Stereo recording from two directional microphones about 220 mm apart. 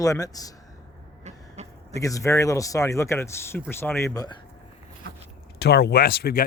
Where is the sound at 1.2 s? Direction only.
30° right (ahead or behind).